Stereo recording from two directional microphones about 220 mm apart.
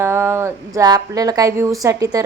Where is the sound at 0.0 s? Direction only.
10° right (ahead or behind).